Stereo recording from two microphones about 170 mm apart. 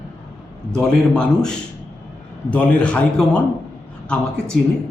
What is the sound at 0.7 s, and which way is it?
A man's voice, 5° left (ahead or behind).